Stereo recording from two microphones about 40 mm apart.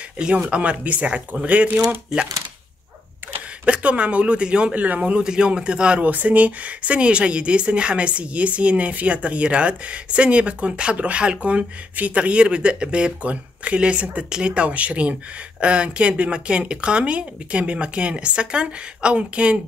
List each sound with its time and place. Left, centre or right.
0.5 s speech: right
3.6 s speech: right
4.7 s speech: right
5.2 s speech: right
6.0 s speech: right